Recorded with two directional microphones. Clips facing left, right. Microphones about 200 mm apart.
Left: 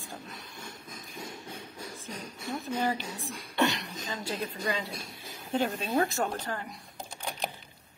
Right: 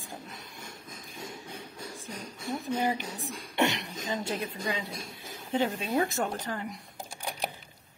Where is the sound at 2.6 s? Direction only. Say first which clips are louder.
Right 1 dB; 15° right (ahead or behind).